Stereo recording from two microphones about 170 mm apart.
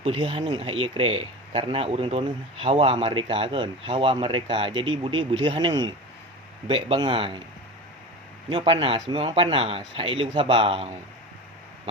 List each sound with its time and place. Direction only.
0.0 s speech: 30° right (ahead or behind)
8.4 s speech: 30° right (ahead or behind)